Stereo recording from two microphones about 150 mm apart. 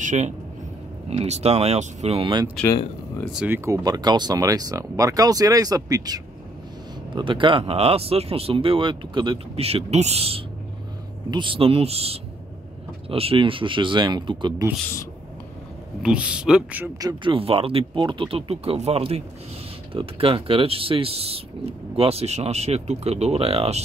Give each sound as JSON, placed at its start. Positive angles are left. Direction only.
{"t": 0.0, "sound": "speech", "side_deg": -55}
{"t": 3.4, "sound": "speech", "side_deg": -15}
{"t": 16.0, "sound": "speech", "side_deg": -5}
{"t": 17.0, "sound": "speech", "side_deg": -35}